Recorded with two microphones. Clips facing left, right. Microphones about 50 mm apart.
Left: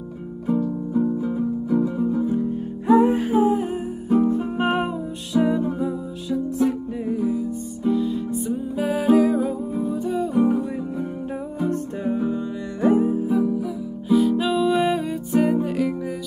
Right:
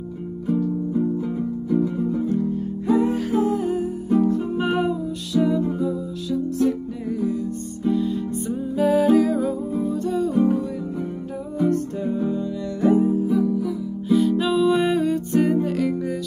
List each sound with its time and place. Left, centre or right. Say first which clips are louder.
0.9 s music: left 4 dB; centre
7.8 s music: even; centre
11.5 s music: right 5 dB; left
14.4 s music: right 1 dB; centre